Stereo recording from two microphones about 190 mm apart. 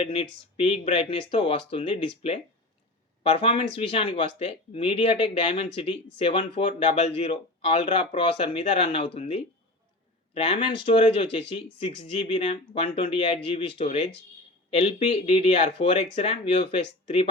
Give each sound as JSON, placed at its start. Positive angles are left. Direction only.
{"t": 0.0, "sound": "speech", "side_deg": 30}